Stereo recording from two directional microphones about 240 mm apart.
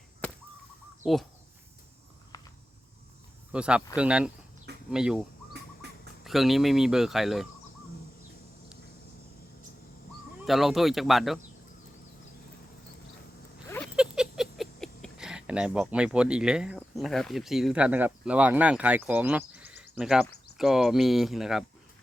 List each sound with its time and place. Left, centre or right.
1.0 s speech: centre
2.3 s cricket: centre
3.5 s speech: centre
6.2 s speech: centre
10.4 s speech: centre
13.7 s a sound: centre
13.9 s speech: centre